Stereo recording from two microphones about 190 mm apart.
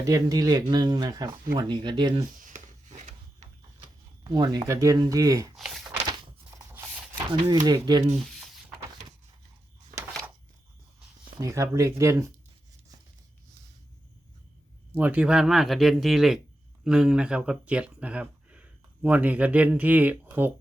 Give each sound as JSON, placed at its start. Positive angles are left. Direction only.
{"t": 0.0, "sound": "speech", "side_deg": -20}
{"t": 2.4, "sound": "a sound", "side_deg": -40}
{"t": 4.2, "sound": "speech", "side_deg": -20}
{"t": 5.5, "sound": "speech", "side_deg": 0}
{"t": 7.4, "sound": "speech", "side_deg": -20}
{"t": 11.3, "sound": "speech", "side_deg": -15}
{"t": 14.9, "sound": "speech", "side_deg": -5}